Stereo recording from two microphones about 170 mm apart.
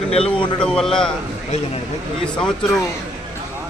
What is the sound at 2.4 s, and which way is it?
Speech, 5° left (ahead or behind).